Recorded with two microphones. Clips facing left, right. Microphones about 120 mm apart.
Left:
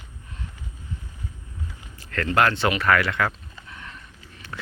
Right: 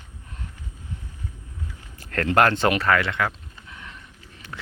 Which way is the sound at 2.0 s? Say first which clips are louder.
Right 2 dB; 50° right (ahead or behind).